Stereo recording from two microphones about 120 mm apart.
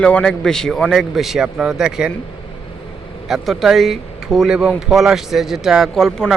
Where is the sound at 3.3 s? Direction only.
Centre (ahead or behind).